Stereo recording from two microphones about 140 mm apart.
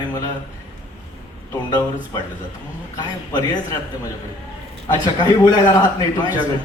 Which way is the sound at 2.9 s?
20° left (ahead or behind).